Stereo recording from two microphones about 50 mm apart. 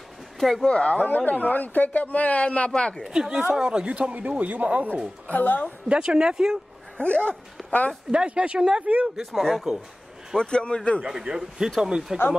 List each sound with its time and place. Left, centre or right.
0.4 s speech: centre
0.7 s speech: left
1.0 s speech: left
3.1 s speech: centre
5.3 s speech: left
5.9 s speech: centre
7.0 s speech: left
8.1 s speech: centre
9.1 s speech: centre
10.3 s speech: centre
11.1 s speech: centre